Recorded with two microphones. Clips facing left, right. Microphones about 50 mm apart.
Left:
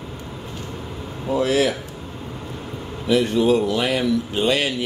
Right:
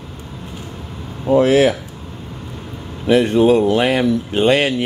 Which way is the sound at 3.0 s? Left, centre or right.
Right.